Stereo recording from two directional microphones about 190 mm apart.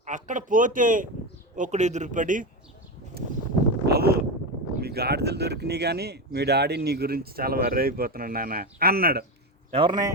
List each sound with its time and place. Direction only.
0.0 s a man's voice: 40° right (ahead or behind)
3.8 s wind noise: 55° right (ahead or behind)
4.8 s speech: 55° right (ahead or behind)
9.7 s a man's voice: 25° right (ahead or behind)